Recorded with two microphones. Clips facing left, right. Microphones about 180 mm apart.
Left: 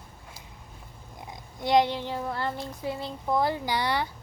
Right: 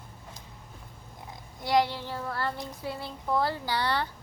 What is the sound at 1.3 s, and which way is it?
A child's voice, 20° left (ahead or behind).